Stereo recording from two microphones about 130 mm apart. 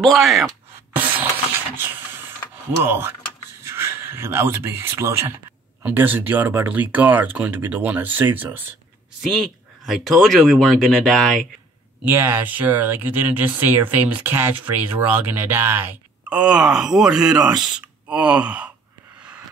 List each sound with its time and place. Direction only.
0.0 s speech: centre (ahead or behind)
0.9 s a sound: 15° right (ahead or behind)
2.8 s speech: 15° right (ahead or behind)
9.3 s speech: centre (ahead or behind)
12.0 s speech: 20° right (ahead or behind)